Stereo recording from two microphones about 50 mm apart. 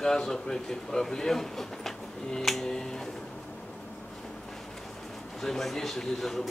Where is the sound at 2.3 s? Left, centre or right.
Centre.